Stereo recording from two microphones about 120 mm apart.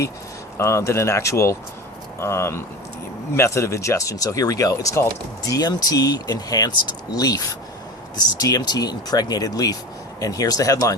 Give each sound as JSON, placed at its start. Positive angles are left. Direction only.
{"t": 0.5, "sound": "speech", "side_deg": 25}